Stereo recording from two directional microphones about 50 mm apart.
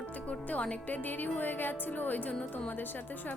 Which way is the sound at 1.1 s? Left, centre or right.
Left.